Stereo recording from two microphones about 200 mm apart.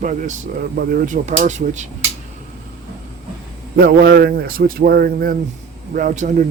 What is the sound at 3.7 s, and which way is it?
A man's voice, 50° right (ahead or behind).